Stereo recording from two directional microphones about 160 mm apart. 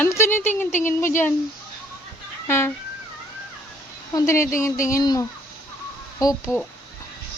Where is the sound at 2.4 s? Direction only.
15° left (ahead or behind).